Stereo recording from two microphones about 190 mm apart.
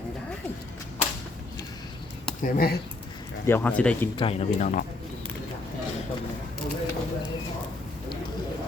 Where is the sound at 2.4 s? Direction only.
55° left (ahead or behind).